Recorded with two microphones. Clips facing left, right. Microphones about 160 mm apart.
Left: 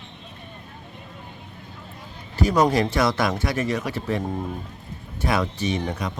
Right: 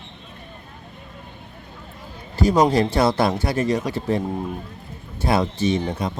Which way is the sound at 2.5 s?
30° right (ahead or behind).